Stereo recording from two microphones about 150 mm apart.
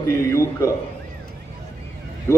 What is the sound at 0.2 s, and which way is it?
Speech, 20° left (ahead or behind).